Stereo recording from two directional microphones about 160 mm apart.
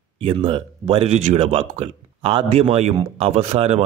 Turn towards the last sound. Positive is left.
turn(degrees=-40)  # may be behind; listen again after turning